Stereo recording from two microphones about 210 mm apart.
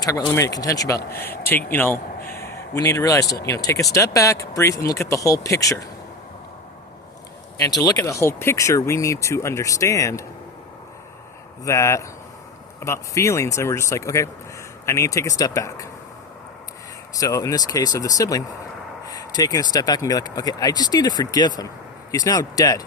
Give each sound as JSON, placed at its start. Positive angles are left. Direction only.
{"t": 0.0, "sound": "a man's voice", "side_deg": 15}
{"t": 7.8, "sound": "speech", "side_deg": 15}
{"t": 11.6, "sound": "speech", "side_deg": 15}
{"t": 17.2, "sound": "speech", "side_deg": 15}